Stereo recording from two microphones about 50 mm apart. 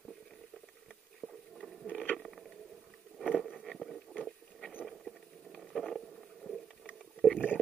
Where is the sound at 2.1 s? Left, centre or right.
Centre.